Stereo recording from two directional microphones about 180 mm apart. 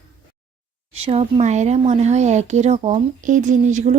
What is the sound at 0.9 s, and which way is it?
Speech, 35° right (ahead or behind).